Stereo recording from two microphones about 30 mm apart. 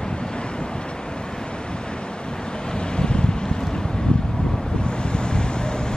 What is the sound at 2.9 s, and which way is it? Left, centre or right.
Wind, left.